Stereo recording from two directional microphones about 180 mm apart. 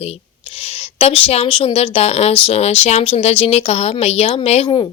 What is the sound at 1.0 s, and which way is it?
Speech, 30° left (ahead or behind).